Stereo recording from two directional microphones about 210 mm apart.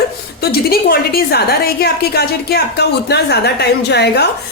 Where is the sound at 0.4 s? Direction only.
45° left (ahead or behind).